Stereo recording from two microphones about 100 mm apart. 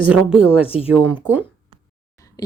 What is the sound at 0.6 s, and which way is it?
Speech, 75° left (ahead or behind).